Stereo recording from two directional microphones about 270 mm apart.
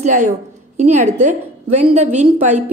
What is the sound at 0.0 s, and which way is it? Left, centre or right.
A woman's voice, right.